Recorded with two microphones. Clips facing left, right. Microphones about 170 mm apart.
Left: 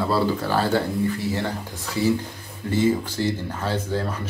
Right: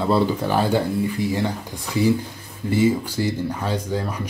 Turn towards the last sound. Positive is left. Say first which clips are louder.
# right 1 dB
turn(degrees=-15)  # may be behind; listen again after turning